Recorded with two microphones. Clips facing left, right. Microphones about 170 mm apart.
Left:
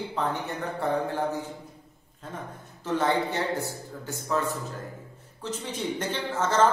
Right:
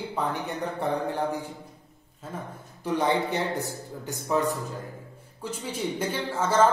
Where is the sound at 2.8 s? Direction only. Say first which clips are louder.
Right 1 dB; 15° right (ahead or behind).